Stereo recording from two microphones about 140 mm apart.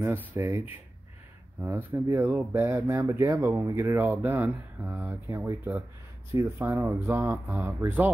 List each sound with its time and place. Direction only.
0.0 s speech: 15° right (ahead or behind)